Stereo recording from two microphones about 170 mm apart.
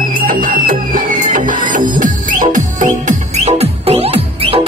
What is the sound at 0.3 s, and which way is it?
Music, 50° right (ahead or behind).